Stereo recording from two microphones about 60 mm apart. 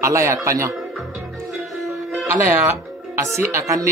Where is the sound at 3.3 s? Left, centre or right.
Right.